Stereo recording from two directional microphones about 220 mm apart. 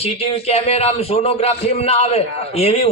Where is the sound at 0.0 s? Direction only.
25° left (ahead or behind).